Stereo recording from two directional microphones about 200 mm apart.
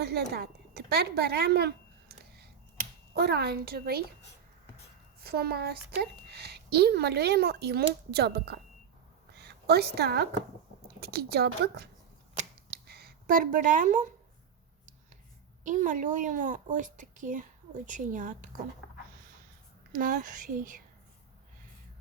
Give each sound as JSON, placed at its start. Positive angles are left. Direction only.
{"t": 0.0, "sound": "a woman's voice", "side_deg": -55}
{"t": 5.2, "sound": "a woman's voice", "side_deg": -50}
{"t": 9.3, "sound": "a sound", "side_deg": -55}
{"t": 11.0, "sound": "a woman's voice", "side_deg": -55}
{"t": 12.7, "sound": "a sound", "side_deg": -55}
{"t": 15.6, "sound": "a woman's voice", "side_deg": -40}
{"t": 19.9, "sound": "a woman's voice", "side_deg": -40}